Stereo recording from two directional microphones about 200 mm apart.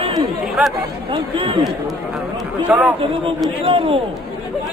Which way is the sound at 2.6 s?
5° right (ahead or behind).